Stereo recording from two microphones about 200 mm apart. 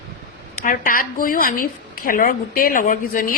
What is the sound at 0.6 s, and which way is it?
A woman's voice, 45° left (ahead or behind).